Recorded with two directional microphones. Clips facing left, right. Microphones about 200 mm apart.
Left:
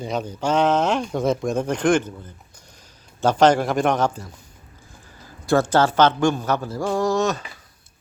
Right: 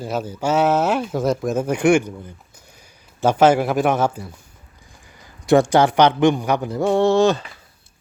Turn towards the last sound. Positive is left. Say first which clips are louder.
# right 5 dB
turn(degrees=-30)  # may be behind; listen again after turning